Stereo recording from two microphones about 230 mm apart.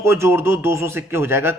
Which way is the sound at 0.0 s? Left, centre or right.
Centre.